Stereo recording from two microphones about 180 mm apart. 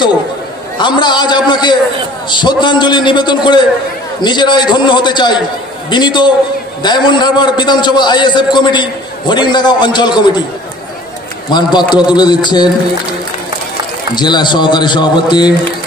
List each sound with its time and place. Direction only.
0.7 s a man's voice: 25° left (ahead or behind)
11.5 s a man's voice: 25° left (ahead or behind)
14.1 s a man's voice: 25° left (ahead or behind)